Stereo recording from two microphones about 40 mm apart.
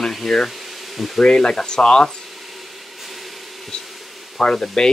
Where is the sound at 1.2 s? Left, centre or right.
Centre.